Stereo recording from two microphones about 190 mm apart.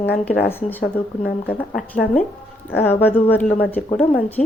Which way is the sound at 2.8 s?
10° left (ahead or behind).